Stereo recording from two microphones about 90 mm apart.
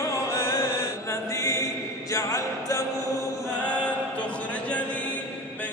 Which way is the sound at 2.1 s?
35° left (ahead or behind).